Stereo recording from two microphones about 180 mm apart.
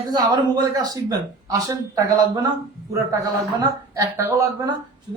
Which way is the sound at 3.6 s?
20° right (ahead or behind).